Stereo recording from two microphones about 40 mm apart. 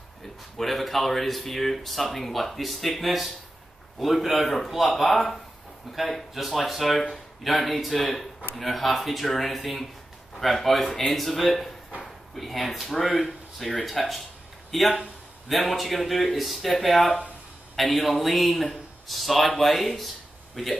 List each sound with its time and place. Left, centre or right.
0.6 s speech: centre